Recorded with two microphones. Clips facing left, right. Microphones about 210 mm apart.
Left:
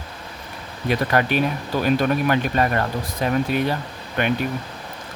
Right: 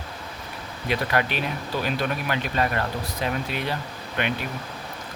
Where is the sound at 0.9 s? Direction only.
45° left (ahead or behind).